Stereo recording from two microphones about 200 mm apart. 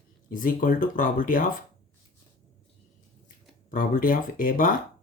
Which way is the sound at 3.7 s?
45° left (ahead or behind).